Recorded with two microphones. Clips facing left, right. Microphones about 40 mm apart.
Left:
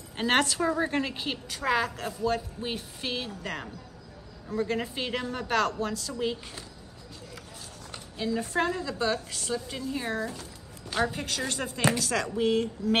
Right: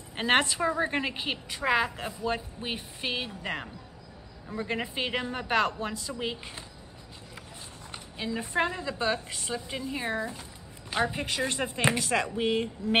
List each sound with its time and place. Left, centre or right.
0.1 s a woman's voice: centre
7.9 s a woman's voice: centre